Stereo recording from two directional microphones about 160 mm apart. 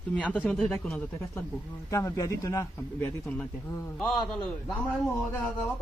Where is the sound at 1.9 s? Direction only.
20° left (ahead or behind).